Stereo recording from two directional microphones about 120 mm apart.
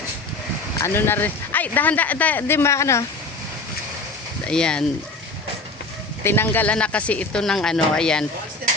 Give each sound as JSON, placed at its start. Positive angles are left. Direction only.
{"t": 0.8, "sound": "speech", "side_deg": 20}
{"t": 4.4, "sound": "speech", "side_deg": 5}
{"t": 6.2, "sound": "speech", "side_deg": 20}